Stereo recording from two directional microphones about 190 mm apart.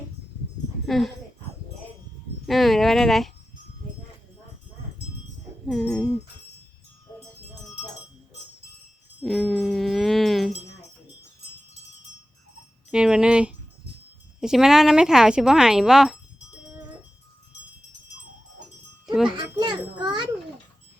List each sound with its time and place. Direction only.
0.9 s speech: centre (ahead or behind)
2.5 s speech: centre (ahead or behind)
5.6 s speech: centre (ahead or behind)
9.2 s a sound: centre (ahead or behind)
12.9 s speech: 5° right (ahead or behind)
19.3 s a sound: 20° right (ahead or behind)